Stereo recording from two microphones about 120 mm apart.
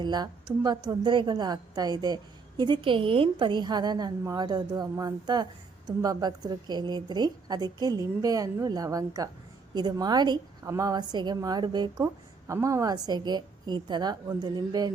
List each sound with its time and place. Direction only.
0.0 s a woman's voice: 35° right (ahead or behind)
12.0 s a woman's voice: 25° right (ahead or behind)